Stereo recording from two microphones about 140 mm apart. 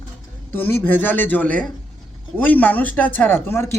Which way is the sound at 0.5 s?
15° left (ahead or behind).